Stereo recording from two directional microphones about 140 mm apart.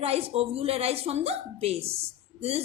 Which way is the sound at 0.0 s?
45° right (ahead or behind).